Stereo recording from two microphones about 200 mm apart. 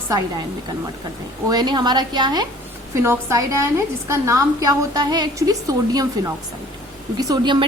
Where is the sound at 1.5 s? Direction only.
20° right (ahead or behind).